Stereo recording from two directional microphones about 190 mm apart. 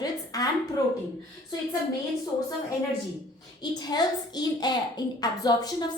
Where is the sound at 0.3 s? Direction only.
20° left (ahead or behind).